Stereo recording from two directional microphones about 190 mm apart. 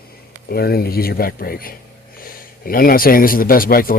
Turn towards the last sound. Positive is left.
turn(degrees=50)  # may be behind; listen again after turning